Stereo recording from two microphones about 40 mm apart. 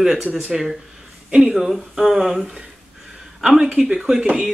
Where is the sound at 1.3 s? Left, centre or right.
Right.